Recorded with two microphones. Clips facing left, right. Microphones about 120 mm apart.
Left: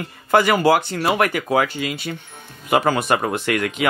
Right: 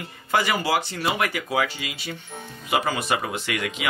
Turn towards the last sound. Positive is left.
turn(degrees=50)  # may be behind; listen again after turning